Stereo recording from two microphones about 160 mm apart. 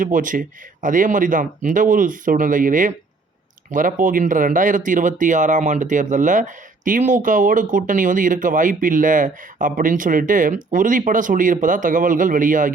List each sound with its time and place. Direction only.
0.0 s speech: 55° right (ahead or behind)